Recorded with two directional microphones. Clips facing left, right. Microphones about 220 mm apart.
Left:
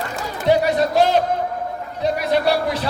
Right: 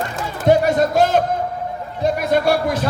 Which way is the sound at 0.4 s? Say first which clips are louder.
Right 2 dB; 50° right (ahead or behind).